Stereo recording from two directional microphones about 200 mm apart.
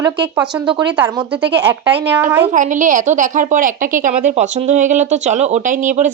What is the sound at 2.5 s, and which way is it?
A woman's voice, 40° right (ahead or behind).